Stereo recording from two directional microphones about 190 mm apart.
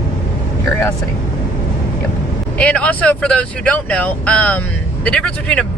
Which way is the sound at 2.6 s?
5° left (ahead or behind).